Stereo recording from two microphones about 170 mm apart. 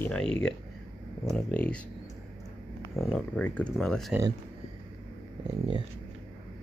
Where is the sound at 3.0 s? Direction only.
Centre (ahead or behind).